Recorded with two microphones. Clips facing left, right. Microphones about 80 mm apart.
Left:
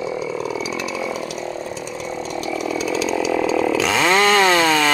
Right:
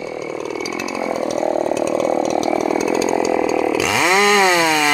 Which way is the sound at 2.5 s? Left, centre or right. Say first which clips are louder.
Right 5 dB; right.